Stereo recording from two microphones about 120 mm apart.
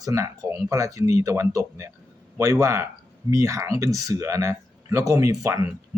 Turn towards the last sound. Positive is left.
turn(degrees=-30)  # may be behind; listen again after turning